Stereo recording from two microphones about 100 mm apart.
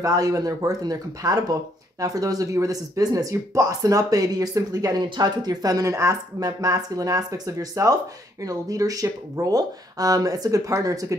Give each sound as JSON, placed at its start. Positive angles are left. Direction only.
{"t": 0.0, "sound": "speech", "side_deg": -35}